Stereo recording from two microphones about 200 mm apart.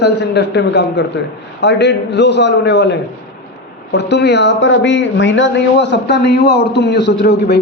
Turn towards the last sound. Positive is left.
turn(degrees=60)  # may be behind; listen again after turning